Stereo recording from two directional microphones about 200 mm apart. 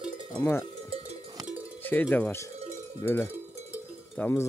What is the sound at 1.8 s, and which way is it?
Speech, 10° left (ahead or behind).